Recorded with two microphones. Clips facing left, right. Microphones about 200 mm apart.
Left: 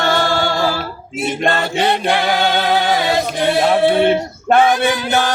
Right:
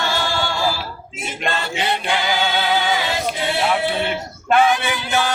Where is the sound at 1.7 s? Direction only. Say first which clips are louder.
Left 6 dB; 35° left (ahead or behind).